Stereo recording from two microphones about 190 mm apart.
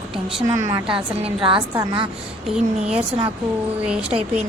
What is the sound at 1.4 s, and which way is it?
Speech, 25° right (ahead or behind).